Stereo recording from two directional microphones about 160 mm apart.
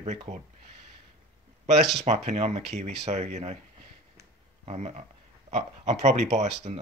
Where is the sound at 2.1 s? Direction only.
40° right (ahead or behind).